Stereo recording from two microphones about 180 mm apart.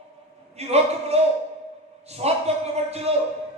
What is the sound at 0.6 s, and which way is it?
Speech, 35° right (ahead or behind).